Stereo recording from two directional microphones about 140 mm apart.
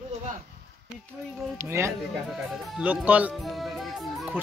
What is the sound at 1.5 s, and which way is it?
Speech, 20° right (ahead or behind).